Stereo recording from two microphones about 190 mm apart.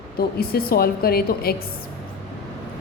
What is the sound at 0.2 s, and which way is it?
A woman's voice, 55° left (ahead or behind).